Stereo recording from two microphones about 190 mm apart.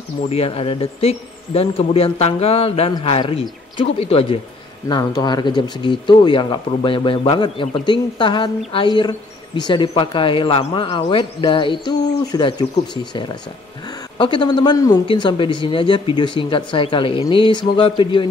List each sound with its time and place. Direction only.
0.3 s speech: 30° left (ahead or behind)